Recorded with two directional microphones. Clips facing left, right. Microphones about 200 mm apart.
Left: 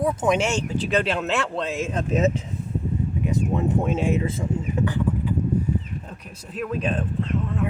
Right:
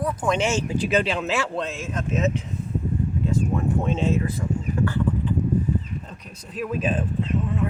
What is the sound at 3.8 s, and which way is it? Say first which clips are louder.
Speech: even; 10° left (ahead or behind).